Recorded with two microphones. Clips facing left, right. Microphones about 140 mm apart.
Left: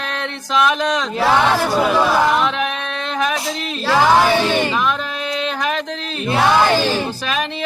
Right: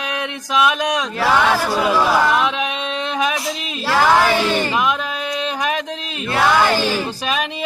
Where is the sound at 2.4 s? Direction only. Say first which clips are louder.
Left 1 dB; 15° right (ahead or behind).